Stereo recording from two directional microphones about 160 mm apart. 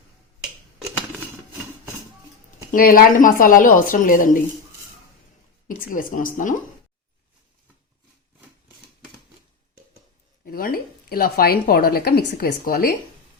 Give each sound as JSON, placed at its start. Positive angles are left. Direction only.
{"t": 2.7, "sound": "a woman's voice", "side_deg": 65}
{"t": 5.6, "sound": "a woman's voice", "side_deg": 60}
{"t": 10.4, "sound": "speech", "side_deg": 65}